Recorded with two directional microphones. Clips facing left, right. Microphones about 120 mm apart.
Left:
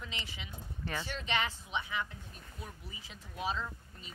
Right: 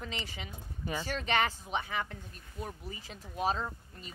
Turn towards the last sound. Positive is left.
turn(degrees=-50)  # may be behind; listen again after turning